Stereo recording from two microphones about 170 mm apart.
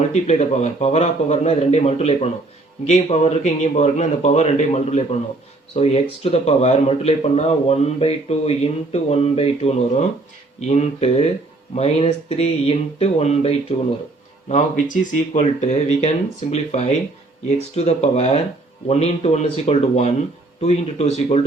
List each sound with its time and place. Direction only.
0.1 s speech: 40° left (ahead or behind)